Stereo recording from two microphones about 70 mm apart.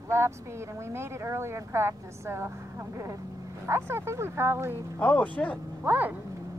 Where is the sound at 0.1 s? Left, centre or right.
Right.